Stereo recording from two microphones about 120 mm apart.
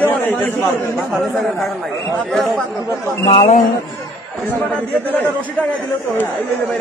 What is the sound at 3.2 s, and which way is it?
Speech, 65° left (ahead or behind).